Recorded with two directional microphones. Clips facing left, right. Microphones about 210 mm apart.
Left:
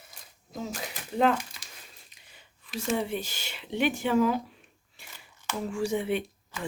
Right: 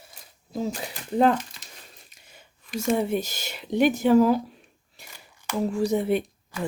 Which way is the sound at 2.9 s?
45° right (ahead or behind).